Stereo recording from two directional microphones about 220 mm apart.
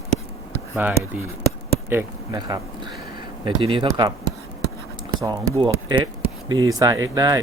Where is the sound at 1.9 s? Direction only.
15° right (ahead or behind).